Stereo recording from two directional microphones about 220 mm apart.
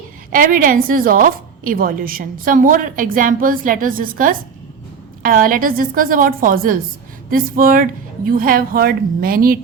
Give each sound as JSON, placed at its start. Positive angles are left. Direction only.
{"t": 0.3, "sound": "a woman's voice", "side_deg": -40}